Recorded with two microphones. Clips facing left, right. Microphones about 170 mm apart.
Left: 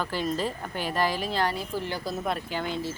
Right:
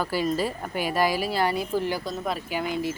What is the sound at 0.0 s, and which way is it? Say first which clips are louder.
Speech: right 3 dB; 10° right (ahead or behind).